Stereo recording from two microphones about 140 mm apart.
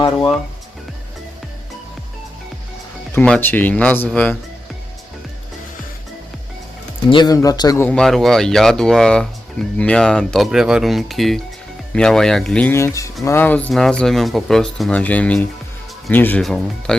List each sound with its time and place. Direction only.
3.2 s speech: 10° left (ahead or behind)
7.1 s a man's voice: 30° left (ahead or behind)
7.8 s speech: 10° left (ahead or behind)
12.7 s a man's voice: 20° left (ahead or behind)
16.4 s speech: centre (ahead or behind)